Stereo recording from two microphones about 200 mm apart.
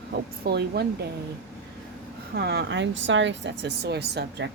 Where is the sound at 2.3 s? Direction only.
55° right (ahead or behind).